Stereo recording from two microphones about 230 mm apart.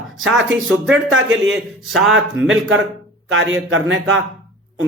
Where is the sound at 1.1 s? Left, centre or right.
Right.